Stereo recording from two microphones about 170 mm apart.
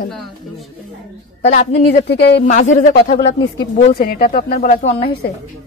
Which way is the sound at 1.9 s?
80° left.